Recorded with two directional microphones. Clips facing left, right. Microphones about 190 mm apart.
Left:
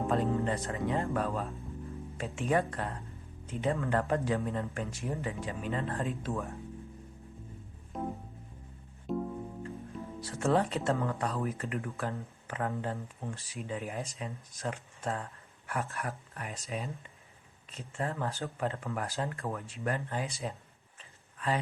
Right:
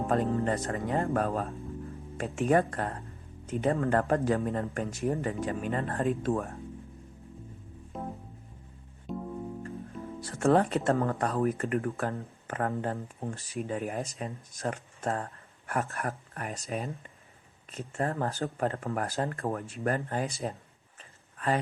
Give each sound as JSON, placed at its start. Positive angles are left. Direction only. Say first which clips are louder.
{"t": 0.1, "sound": "speech", "louder": "right 3 dB", "side_deg": -50}
{"t": 7.9, "sound": "music", "louder": "left 2 dB", "side_deg": 0}
{"t": 10.2, "sound": "speech", "louder": "right 4 dB", "side_deg": -50}
{"t": 21.3, "sound": "a sound", "louder": "right 3 dB", "side_deg": -50}